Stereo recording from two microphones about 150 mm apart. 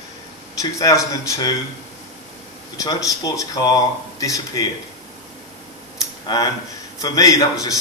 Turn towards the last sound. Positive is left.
turn(degrees=25)  # may be behind; listen again after turning